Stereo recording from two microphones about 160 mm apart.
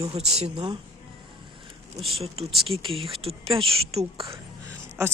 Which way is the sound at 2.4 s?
35° right (ahead or behind).